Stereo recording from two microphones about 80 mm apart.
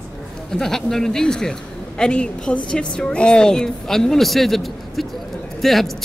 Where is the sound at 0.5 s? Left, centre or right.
Centre.